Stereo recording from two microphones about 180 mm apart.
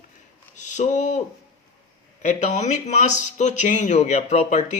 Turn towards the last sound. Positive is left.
turn(degrees=40)  # may be behind; listen again after turning